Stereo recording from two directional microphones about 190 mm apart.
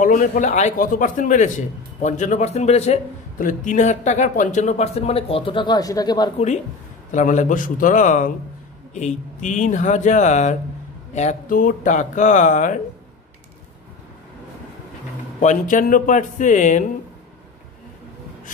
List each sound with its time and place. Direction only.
0.0 s a man's voice: 45° left (ahead or behind); by 6.3 s 20° left (ahead or behind)
7.1 s a man's voice: 40° left (ahead or behind)
15.4 s a man's voice: 45° left (ahead or behind)